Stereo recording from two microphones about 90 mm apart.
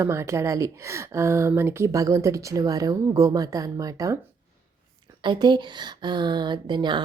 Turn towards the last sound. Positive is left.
turn(degrees=-55)  # may be behind; listen again after turning